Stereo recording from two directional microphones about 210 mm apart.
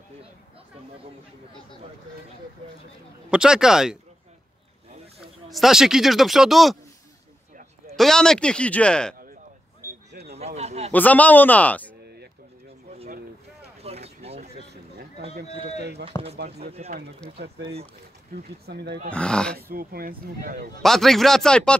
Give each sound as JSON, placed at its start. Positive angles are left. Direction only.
{"t": 3.3, "sound": "speech", "side_deg": -5}
{"t": 5.5, "sound": "speech", "side_deg": 0}
{"t": 7.9, "sound": "speech", "side_deg": 0}
{"t": 10.1, "sound": "a sound", "side_deg": -50}
{"t": 10.4, "sound": "a man's voice", "side_deg": -30}
{"t": 10.9, "sound": "speech", "side_deg": 10}
{"t": 13.7, "sound": "a sound", "side_deg": -30}
{"t": 14.6, "sound": "a sound", "side_deg": -50}
{"t": 15.8, "sound": "speech", "side_deg": -50}
{"t": 16.7, "sound": "speech", "side_deg": -30}
{"t": 18.7, "sound": "speech", "side_deg": -50}
{"t": 19.0, "sound": "speech", "side_deg": 5}
{"t": 19.5, "sound": "speech", "side_deg": -45}
{"t": 20.8, "sound": "speech", "side_deg": 0}